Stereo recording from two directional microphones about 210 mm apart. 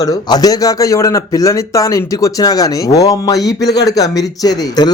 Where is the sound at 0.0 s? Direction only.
20° left (ahead or behind).